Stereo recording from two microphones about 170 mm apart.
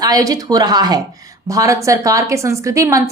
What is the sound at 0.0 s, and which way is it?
A woman's voice, 20° right (ahead or behind).